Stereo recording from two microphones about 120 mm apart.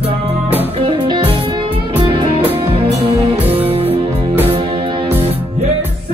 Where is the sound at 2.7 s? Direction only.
55° right (ahead or behind).